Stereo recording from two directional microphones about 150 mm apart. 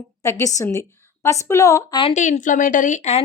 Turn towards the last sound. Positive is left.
turn(degrees=50)  # may be behind; listen again after turning